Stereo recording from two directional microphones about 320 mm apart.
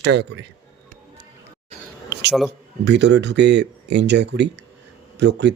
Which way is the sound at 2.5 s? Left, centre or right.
Right.